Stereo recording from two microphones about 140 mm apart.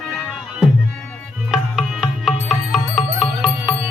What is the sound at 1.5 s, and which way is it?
Music, 5° right (ahead or behind).